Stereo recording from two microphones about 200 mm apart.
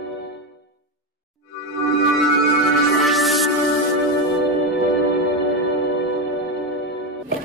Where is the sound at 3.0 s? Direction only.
Centre (ahead or behind).